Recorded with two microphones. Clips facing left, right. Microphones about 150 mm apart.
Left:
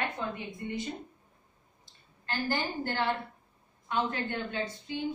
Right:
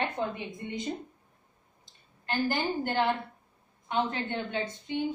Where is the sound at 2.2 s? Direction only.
15° right (ahead or behind).